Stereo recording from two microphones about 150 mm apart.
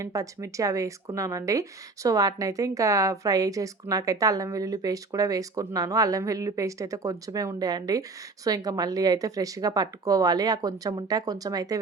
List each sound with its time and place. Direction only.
0.0 s a woman's voice: 20° right (ahead or behind)